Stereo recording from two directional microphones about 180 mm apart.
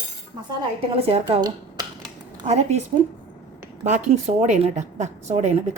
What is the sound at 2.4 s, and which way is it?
Speech, 35° right (ahead or behind).